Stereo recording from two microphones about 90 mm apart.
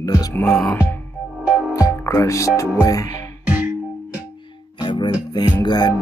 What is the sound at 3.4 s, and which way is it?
Music, 15° right (ahead or behind).